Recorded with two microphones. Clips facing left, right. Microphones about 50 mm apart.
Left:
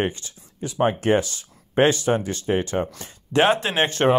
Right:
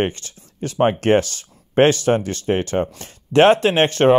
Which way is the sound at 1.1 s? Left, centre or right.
Right.